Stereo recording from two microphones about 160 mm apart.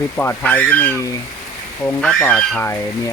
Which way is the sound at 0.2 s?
10° left (ahead or behind).